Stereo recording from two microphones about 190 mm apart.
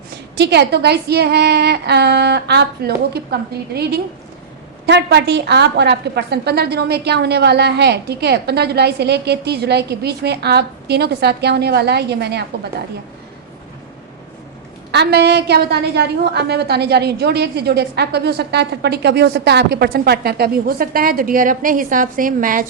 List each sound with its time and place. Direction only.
0.3 s a woman's voice: 60° right (ahead or behind)
14.9 s a woman's voice: 60° right (ahead or behind)